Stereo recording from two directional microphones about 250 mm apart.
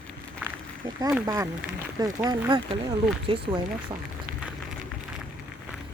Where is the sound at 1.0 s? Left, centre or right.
Centre.